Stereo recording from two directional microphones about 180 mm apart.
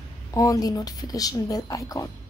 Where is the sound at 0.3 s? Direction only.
20° left (ahead or behind).